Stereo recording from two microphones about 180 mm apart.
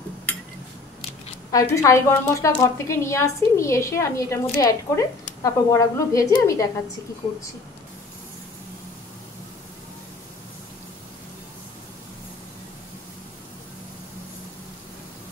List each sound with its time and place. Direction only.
1.5 s a woman's voice: 20° left (ahead or behind)